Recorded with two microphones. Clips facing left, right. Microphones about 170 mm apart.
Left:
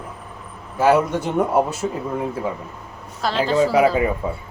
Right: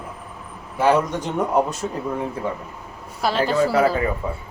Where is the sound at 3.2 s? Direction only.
10° right (ahead or behind).